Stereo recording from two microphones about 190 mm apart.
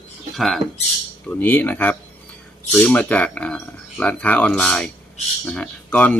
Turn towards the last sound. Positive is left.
turn(degrees=10)  # may be behind; listen again after turning